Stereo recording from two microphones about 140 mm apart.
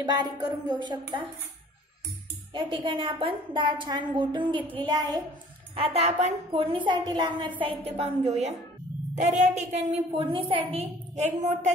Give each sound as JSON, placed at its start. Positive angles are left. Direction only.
{"t": 0.0, "sound": "a woman's voice", "side_deg": -30}
{"t": 2.5, "sound": "a woman's voice", "side_deg": -35}
{"t": 5.8, "sound": "a woman's voice", "side_deg": -45}
{"t": 6.5, "sound": "a woman's voice", "side_deg": -40}